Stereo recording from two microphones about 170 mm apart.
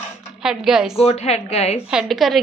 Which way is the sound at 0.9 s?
35° left (ahead or behind).